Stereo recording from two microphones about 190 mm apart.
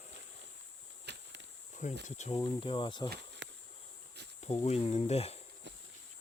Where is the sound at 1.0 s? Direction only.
65° right (ahead or behind).